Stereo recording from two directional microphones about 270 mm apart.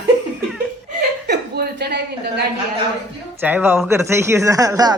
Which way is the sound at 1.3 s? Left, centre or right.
Right.